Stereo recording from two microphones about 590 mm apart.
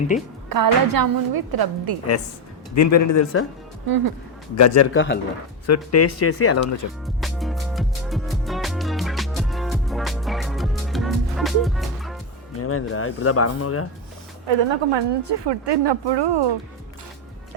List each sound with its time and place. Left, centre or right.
0.1 s a woman's voice: centre
0.5 s a woman's voice: right
2.7 s speech: left
3.8 s a woman's voice: right
4.5 s speech: left
7.0 s music: centre
12.5 s speech: left
14.4 s a woman's voice: right